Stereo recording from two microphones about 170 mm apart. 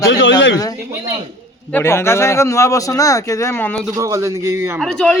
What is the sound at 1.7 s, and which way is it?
A man's voice, 15° left (ahead or behind).